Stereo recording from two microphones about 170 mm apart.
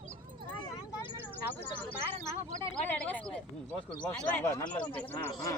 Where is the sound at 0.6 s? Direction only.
30° left (ahead or behind).